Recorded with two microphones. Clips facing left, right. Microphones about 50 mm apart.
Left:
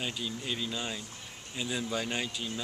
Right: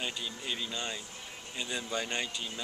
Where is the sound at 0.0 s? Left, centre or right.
Centre.